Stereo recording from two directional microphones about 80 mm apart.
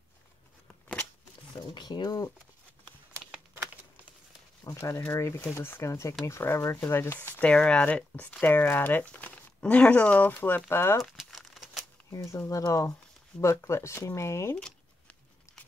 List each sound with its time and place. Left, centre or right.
1.5 s speech: left
3.1 s a sound: right
4.6 s speech: left
11.2 s crumpling: centre
12.1 s speech: left
14.6 s a sound: centre